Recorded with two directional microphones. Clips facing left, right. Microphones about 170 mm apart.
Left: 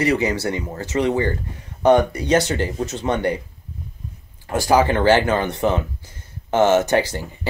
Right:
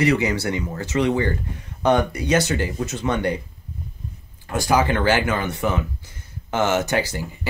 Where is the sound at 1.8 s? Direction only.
15° left (ahead or behind).